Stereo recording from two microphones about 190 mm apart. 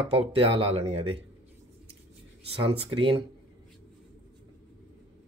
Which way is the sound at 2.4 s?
30° right (ahead or behind).